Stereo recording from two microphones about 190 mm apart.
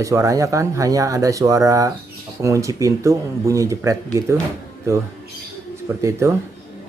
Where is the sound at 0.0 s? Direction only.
15° right (ahead or behind).